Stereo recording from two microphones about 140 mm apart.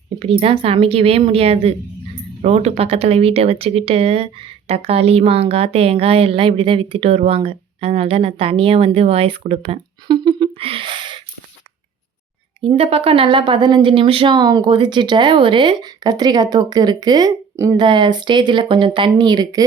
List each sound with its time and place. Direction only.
0.2 s speech: 45° right (ahead or behind)
10.1 s a sound: 35° right (ahead or behind)
12.6 s speech: 45° right (ahead or behind); by 19.6 s 30° right (ahead or behind)